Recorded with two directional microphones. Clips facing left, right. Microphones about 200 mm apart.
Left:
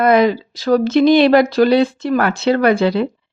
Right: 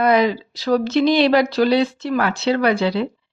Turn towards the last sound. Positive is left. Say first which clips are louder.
# left 4 dB
turn(degrees=50)  # may be behind; listen again after turning